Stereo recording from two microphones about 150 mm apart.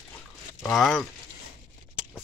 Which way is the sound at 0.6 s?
Centre (ahead or behind).